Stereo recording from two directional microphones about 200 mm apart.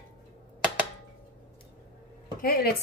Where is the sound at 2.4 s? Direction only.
50° left (ahead or behind).